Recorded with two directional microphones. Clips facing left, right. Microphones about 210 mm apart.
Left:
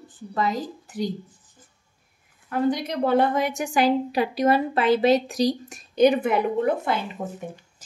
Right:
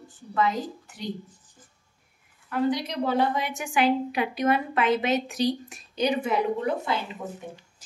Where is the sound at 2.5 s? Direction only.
50° left (ahead or behind).